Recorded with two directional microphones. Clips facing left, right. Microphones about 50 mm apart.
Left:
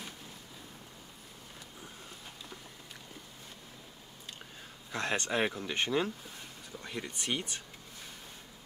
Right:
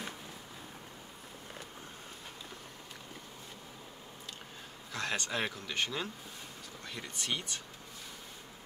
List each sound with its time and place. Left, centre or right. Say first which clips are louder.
4.9 s speech: left 3 dB; left